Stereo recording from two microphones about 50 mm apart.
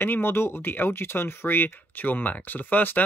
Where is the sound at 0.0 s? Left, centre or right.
Left.